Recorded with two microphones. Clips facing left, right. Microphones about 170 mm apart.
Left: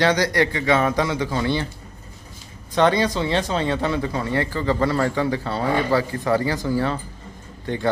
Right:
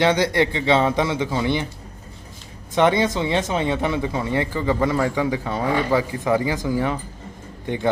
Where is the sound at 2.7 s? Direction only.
20° right (ahead or behind).